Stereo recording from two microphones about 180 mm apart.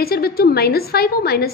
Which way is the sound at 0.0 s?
55° left (ahead or behind).